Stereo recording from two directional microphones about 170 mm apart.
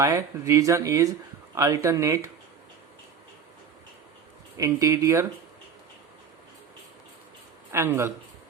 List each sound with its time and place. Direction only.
0.0 s speech: 20° right (ahead or behind)
4.5 s speech: 20° right (ahead or behind)
7.7 s speech: 15° right (ahead or behind)